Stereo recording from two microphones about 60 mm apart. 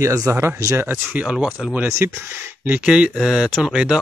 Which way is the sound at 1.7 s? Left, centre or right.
Right.